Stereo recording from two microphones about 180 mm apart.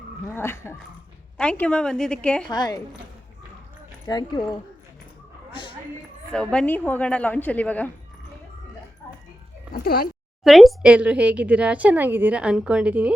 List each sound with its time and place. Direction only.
0.3 s a woman's voice: 15° left (ahead or behind)
2.5 s speech: 20° left (ahead or behind)
4.0 s speech: 20° left (ahead or behind)
6.3 s a woman's voice: 5° left (ahead or behind)
9.7 s speech: 60° left (ahead or behind)
10.4 s speech: centre (ahead or behind)